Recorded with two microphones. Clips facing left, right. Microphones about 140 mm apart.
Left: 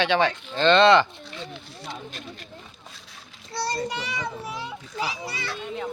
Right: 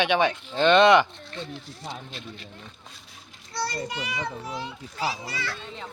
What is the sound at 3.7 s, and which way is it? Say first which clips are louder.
Speech: left 3 dB; 35° left (ahead or behind).